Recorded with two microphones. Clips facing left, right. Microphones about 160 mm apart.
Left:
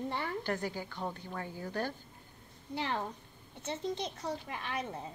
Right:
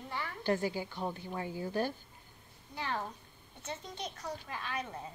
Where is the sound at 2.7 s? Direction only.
25° left (ahead or behind).